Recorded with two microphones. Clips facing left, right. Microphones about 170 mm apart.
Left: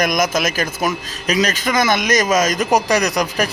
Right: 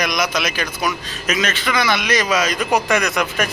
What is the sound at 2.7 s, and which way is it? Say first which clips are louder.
Speech: left 1 dB; 35° left (ahead or behind).